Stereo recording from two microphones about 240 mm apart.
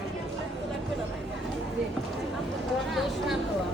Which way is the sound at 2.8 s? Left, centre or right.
Centre.